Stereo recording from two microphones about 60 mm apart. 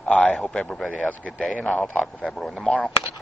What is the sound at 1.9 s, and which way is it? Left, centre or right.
Speech, centre.